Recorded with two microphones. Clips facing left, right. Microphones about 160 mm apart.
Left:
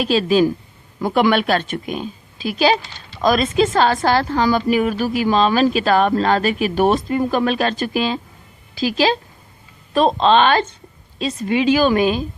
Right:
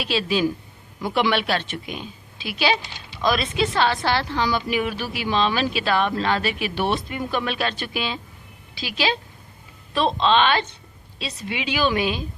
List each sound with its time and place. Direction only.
0.0 s a woman's voice: 45° left (ahead or behind)